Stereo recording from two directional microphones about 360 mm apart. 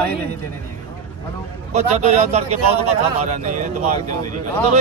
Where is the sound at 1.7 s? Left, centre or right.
Centre.